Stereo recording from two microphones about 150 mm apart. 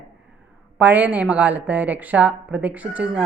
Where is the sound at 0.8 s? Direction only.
10° right (ahead or behind).